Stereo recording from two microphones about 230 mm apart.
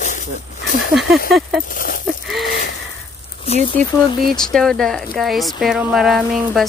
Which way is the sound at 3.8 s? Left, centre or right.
Right.